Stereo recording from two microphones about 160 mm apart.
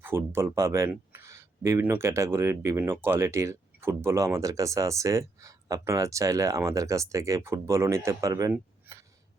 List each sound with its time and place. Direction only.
0.0 s speech: 15° right (ahead or behind)